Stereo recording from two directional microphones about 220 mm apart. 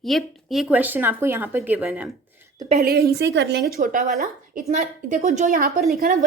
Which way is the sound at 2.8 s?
45° right (ahead or behind).